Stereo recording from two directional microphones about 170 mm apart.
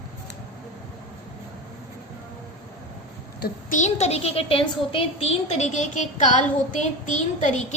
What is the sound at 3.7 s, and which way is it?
A woman's voice, 40° left (ahead or behind).